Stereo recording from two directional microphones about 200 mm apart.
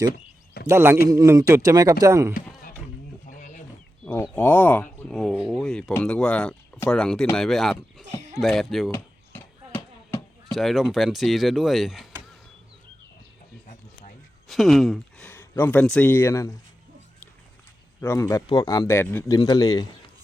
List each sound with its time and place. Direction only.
0.7 s speech: 10° right (ahead or behind)
3.2 s wild animals: 40° left (ahead or behind)
4.0 s speech: 10° left (ahead or behind)
8.9 s a sound: 10° left (ahead or behind)
10.5 s speech: centre (ahead or behind)
14.4 s speech: centre (ahead or behind)
15.3 s speech: 10° left (ahead or behind)
18.0 s speech: 15° left (ahead or behind)